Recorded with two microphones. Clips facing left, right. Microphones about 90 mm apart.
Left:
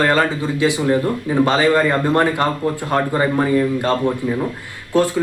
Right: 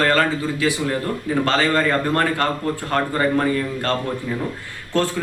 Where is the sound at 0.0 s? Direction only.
15° left (ahead or behind).